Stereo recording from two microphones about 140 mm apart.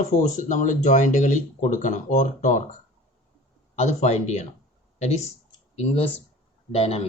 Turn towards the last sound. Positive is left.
turn(degrees=45)  # may be behind; listen again after turning